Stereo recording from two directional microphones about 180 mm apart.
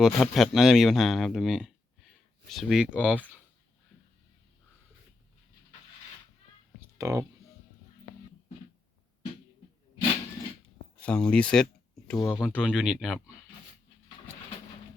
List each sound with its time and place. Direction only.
0.0 s speech: centre (ahead or behind)
6.7 s a sound: 15° right (ahead or behind)
11.0 s speech: 5° left (ahead or behind)
12.1 s speech: 20° left (ahead or behind)
12.4 s speech: 5° right (ahead or behind)